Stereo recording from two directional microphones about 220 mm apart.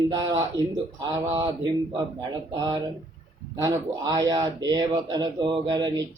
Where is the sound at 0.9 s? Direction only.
20° right (ahead or behind).